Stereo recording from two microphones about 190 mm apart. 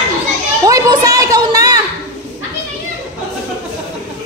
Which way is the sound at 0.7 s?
20° right (ahead or behind).